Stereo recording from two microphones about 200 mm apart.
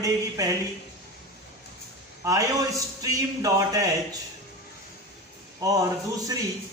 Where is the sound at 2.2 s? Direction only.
15° right (ahead or behind).